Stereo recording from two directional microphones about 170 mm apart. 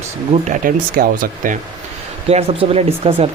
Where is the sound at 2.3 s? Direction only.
35° right (ahead or behind).